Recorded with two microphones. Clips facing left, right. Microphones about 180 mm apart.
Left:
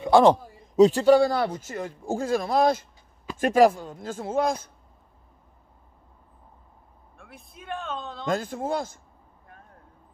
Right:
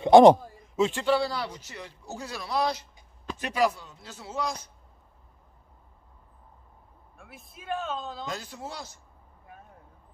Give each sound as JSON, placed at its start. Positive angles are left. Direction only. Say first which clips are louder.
{"t": 0.0, "sound": "a man's voice", "louder": "right 3 dB", "side_deg": -20}
{"t": 0.7, "sound": "speech", "louder": "left 8 dB", "side_deg": 40}
{"t": 7.2, "sound": "speech", "louder": "left 2 dB", "side_deg": -5}
{"t": 8.3, "sound": "speech", "louder": "left 10 dB", "side_deg": 50}